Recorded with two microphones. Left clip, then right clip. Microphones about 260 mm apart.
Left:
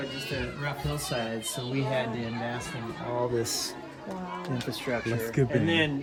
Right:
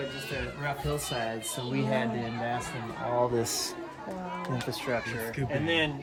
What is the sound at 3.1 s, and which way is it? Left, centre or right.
Speech, right.